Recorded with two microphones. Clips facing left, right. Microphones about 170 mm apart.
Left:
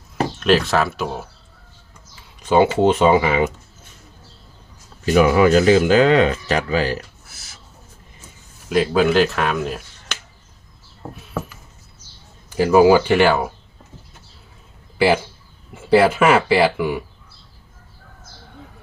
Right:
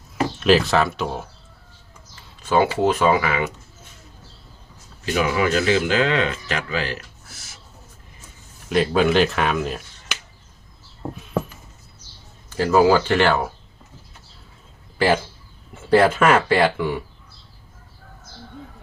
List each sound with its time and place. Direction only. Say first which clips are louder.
0.3 s speech: even; centre (ahead or behind)
2.4 s a sound: left 4 dB; 20° left (ahead or behind)
2.7 s speech: left 4 dB; 25° left (ahead or behind)
5.0 s speech: left 7 dB; 40° left (ahead or behind)
8.7 s speech: left 2 dB; centre (ahead or behind)
12.5 s speech: left 4 dB; 15° left (ahead or behind)
14.9 s speech: left 2 dB; 10° left (ahead or behind)